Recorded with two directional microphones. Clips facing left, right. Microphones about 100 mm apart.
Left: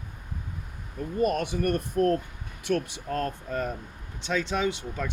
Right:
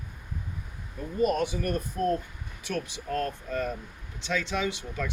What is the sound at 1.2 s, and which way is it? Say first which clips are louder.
Speech: left 1 dB; 60° left (ahead or behind).